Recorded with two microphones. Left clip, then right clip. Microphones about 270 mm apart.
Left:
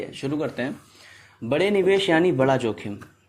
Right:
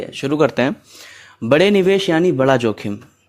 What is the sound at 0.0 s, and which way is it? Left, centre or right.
A man's voice, right.